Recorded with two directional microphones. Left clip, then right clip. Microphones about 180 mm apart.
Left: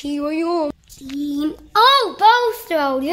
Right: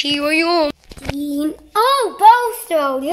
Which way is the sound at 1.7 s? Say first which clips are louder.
Left 2 dB; 10° left (ahead or behind).